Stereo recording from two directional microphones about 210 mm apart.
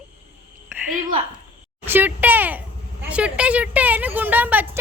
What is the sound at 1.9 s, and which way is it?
Speech, 10° right (ahead or behind).